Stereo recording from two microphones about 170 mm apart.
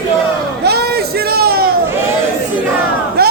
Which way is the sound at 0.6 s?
70° right (ahead or behind).